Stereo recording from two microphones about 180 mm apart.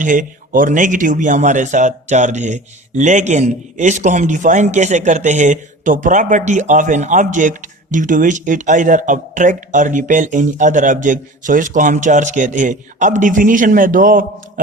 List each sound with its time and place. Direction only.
0.0 s speech: 45° right (ahead or behind)